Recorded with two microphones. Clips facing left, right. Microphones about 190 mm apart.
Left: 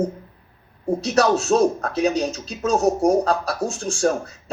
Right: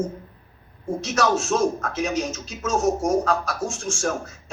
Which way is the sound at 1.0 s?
35° left (ahead or behind).